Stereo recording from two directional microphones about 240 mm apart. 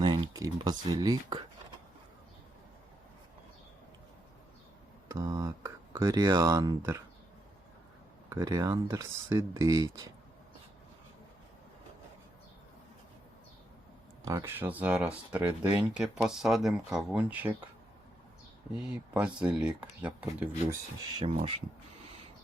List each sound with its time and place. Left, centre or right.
0.0 s speech: centre
5.0 s speech: centre
8.3 s speech: centre
14.3 s speech: centre
18.8 s speech: centre
21.2 s speech: right